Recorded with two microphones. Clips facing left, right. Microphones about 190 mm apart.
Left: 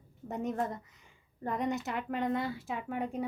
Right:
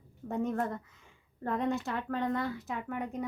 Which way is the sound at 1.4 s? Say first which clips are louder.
Right 2 dB; 15° left (ahead or behind).